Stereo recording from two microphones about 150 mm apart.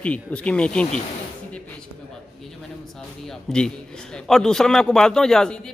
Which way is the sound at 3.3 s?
5° left (ahead or behind).